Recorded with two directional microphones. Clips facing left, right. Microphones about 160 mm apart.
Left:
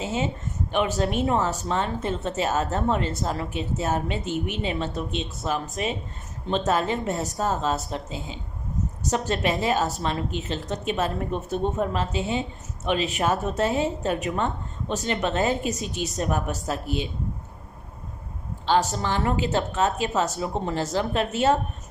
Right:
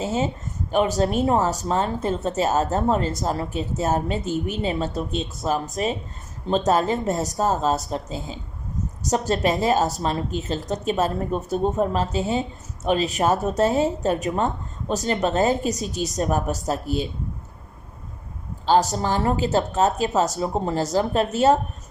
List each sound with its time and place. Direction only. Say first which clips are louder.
0.0 s a sound: right 3 dB; 40° right (ahead or behind)
0.7 s speech: right 4 dB; 40° right (ahead or behind)
18.6 s speech: right 3 dB; 40° right (ahead or behind)